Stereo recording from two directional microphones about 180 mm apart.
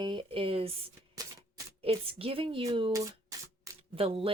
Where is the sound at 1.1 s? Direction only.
20° right (ahead or behind).